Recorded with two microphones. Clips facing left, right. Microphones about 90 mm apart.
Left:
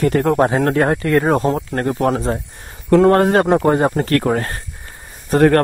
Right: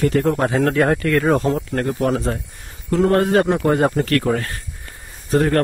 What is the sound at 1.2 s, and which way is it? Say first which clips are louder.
Speech: left 1 dB; 40° left (ahead or behind).